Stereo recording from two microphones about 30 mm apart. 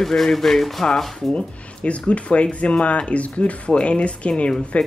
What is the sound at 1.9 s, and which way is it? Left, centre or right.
Speech, left.